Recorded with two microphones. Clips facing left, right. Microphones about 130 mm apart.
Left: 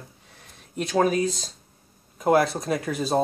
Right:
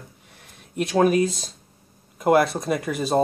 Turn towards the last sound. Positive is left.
turn(degrees=-5)  # may be behind; listen again after turning